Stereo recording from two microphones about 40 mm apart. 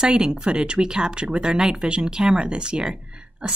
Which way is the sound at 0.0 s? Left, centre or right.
Centre.